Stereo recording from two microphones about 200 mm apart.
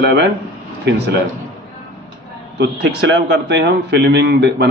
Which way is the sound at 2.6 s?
55° right (ahead or behind).